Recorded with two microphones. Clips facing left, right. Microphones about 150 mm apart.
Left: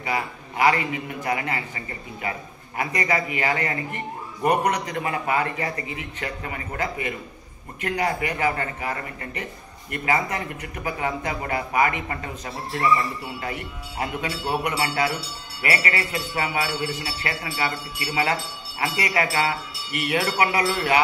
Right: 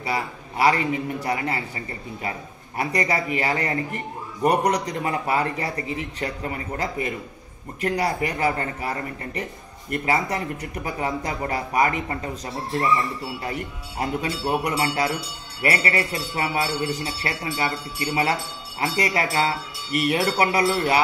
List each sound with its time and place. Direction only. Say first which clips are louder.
0.0 s a man's voice: even; 30° right (ahead or behind)
2.8 s a man's voice: right 1 dB; 35° right (ahead or behind)
13.4 s a man's voice: right 1 dB; 35° right (ahead or behind)